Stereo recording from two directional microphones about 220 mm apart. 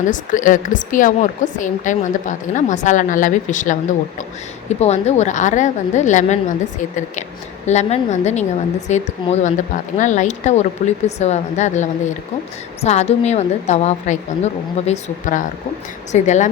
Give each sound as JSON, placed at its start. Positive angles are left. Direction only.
{"t": 0.1, "sound": "a woman's voice", "side_deg": 35}
{"t": 7.7, "sound": "a woman's voice", "side_deg": 30}